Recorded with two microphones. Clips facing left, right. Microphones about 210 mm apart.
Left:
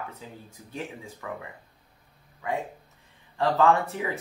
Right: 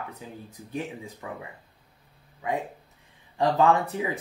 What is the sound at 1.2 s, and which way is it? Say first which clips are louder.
Speech: left 2 dB; 20° right (ahead or behind).